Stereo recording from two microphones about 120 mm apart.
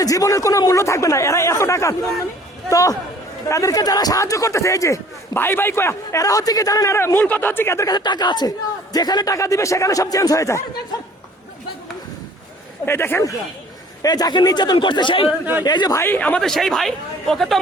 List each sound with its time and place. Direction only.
0.0 s a man's voice: 30° left (ahead or behind)
12.8 s speech: 20° left (ahead or behind)
14.0 s a man's voice: 35° left (ahead or behind)
16.0 s speech: 15° left (ahead or behind)